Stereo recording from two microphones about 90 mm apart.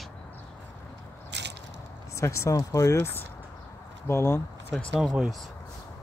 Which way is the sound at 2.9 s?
25° left (ahead or behind).